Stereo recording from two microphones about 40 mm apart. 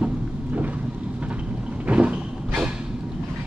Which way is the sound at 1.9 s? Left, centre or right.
Right.